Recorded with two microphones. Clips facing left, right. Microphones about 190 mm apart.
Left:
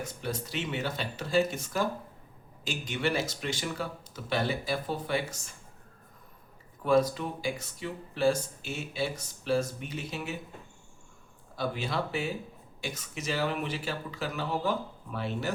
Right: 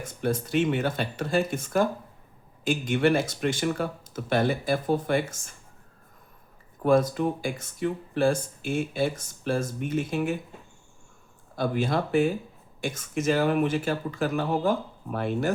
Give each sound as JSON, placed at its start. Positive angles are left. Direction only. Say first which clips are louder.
{"t": 0.0, "sound": "speech", "louder": "right 7 dB", "side_deg": -50}
{"t": 6.8, "sound": "speech", "louder": "right 4 dB", "side_deg": -50}
{"t": 11.5, "sound": "speech", "louder": "right 6 dB", "side_deg": -50}